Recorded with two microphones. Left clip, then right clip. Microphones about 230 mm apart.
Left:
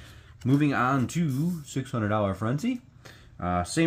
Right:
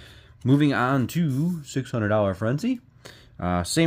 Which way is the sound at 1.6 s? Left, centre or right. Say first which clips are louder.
Right 5 dB; right.